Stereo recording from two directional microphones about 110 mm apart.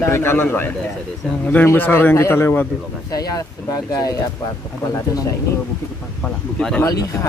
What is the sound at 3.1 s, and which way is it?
Speech, 35° left (ahead or behind).